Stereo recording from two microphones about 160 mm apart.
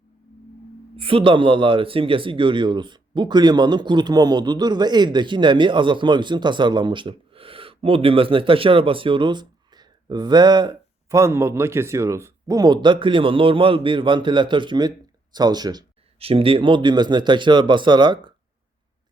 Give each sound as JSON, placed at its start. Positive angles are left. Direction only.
{"t": 0.9, "sound": "speech", "side_deg": -35}
{"t": 16.1, "sound": "speech", "side_deg": -35}